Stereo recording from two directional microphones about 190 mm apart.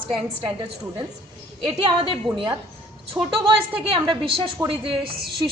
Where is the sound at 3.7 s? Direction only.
30° right (ahead or behind).